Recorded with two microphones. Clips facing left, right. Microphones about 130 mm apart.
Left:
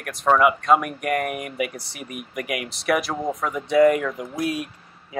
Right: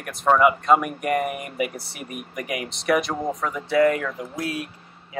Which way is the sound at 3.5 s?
20° left (ahead or behind).